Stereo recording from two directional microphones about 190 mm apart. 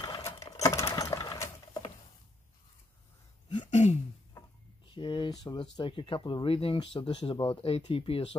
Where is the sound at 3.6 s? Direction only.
35° left (ahead or behind).